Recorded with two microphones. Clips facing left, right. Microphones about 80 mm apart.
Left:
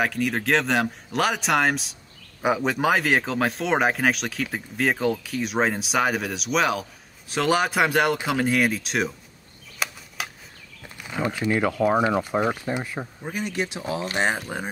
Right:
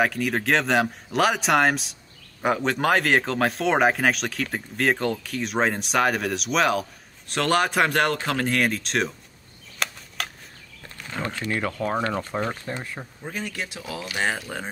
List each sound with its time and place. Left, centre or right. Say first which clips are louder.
0.0 s speech: right 1 dB; centre
9.8 s a sound: even; centre
11.0 s speech: left 4 dB; centre